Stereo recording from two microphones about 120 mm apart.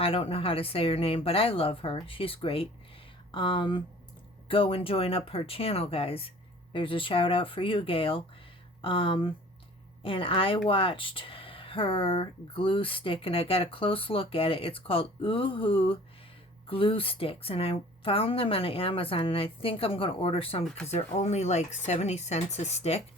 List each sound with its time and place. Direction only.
0.0 s speech: 50° left (ahead or behind)
20.8 s speech: 65° left (ahead or behind)